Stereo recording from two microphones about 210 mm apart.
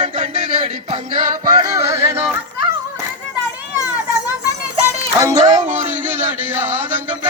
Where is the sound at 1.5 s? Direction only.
20° right (ahead or behind).